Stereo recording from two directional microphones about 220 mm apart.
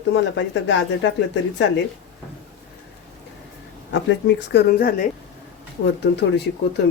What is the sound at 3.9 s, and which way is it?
Speech, 55° left (ahead or behind).